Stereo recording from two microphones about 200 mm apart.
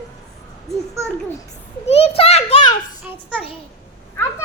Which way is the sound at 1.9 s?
30° left (ahead or behind).